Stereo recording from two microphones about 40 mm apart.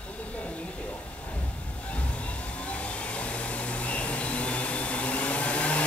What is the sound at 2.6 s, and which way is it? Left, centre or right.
Vacuum cleaner, left.